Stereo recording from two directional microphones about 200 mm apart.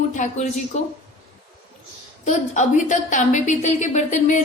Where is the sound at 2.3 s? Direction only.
35° left (ahead or behind).